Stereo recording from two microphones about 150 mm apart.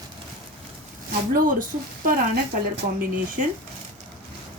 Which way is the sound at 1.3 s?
65° right (ahead or behind).